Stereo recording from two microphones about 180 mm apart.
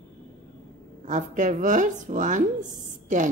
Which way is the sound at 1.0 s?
45° right (ahead or behind).